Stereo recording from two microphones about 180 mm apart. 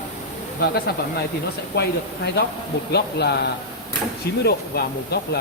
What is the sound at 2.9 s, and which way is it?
Speech, 65° left (ahead or behind).